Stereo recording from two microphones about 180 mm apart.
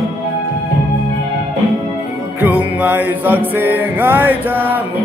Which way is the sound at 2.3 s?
10° right (ahead or behind).